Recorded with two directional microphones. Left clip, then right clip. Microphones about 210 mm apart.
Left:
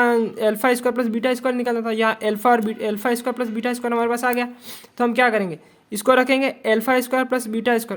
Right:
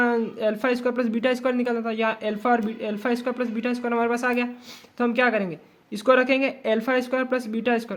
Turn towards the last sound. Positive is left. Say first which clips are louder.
# left 4 dB
turn(degrees=20)  # may be behind; listen again after turning